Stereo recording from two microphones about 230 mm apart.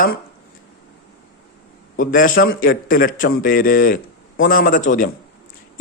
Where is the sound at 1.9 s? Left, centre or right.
Left.